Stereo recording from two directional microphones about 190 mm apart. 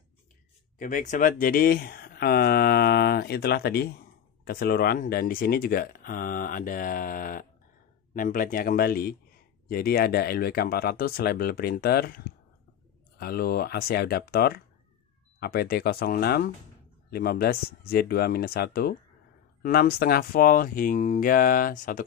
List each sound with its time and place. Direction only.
0.7 s speech: 45° left (ahead or behind)